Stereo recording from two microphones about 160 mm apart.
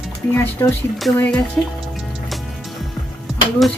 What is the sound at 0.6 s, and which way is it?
Speech, 20° left (ahead or behind).